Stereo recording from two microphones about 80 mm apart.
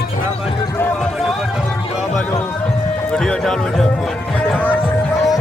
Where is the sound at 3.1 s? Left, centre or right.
Centre.